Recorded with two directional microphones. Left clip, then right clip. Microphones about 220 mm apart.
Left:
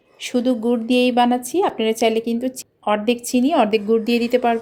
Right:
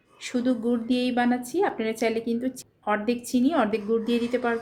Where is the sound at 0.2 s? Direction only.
25° left (ahead or behind).